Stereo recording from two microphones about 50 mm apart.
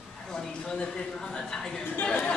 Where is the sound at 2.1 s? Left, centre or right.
Left.